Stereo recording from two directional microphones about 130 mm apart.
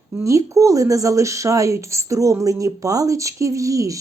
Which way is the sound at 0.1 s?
25° right (ahead or behind).